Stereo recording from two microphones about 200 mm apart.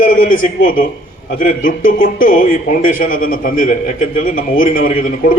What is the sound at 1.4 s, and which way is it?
Speech, 45° left (ahead or behind).